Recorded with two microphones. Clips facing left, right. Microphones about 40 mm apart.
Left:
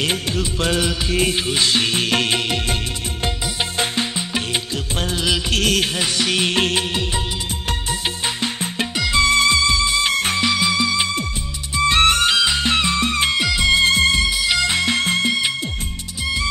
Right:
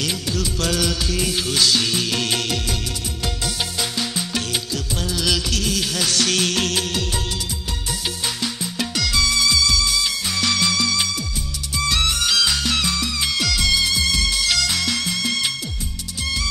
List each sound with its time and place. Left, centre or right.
0.0 s music: left
3.9 s music: left
5.5 s music: left
5.9 s music: left
8.4 s music: left
10.3 s music: centre
12.0 s music: left
12.4 s music: left
13.4 s music: left
14.2 s music: centre